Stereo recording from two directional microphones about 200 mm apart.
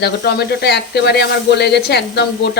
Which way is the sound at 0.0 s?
55° left (ahead or behind).